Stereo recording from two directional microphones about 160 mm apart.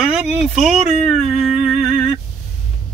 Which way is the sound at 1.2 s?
Centre (ahead or behind).